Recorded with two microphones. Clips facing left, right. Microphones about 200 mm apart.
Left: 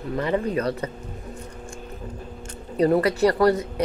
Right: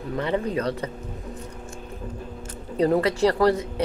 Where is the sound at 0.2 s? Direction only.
10° left (ahead or behind).